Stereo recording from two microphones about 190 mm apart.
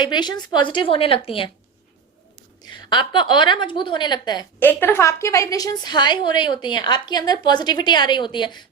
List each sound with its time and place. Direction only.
0.0 s a woman's voice: 20° left (ahead or behind)
2.6 s a woman's voice: 25° left (ahead or behind)
4.6 s a woman's voice: 10° left (ahead or behind)